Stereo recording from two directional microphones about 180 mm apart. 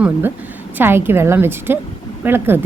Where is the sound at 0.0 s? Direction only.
10° right (ahead or behind).